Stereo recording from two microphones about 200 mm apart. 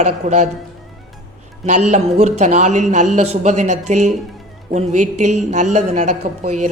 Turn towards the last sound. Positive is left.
turn(degrees=-35)  # may be behind; listen again after turning